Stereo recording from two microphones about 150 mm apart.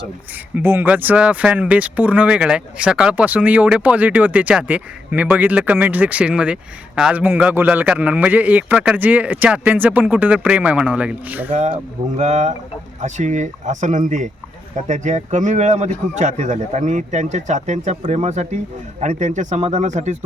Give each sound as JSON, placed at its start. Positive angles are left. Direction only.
{"t": 0.5, "sound": "speech", "side_deg": -15}
{"t": 11.5, "sound": "a man's voice", "side_deg": -50}